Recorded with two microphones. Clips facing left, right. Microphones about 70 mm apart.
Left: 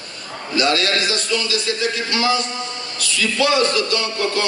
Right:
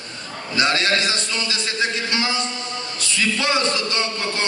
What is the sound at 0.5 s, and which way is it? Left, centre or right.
Speech, right.